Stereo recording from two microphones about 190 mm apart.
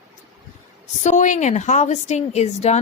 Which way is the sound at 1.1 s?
40° left (ahead or behind).